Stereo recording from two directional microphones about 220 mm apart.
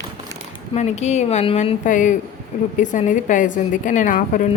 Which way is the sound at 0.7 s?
30° left (ahead or behind).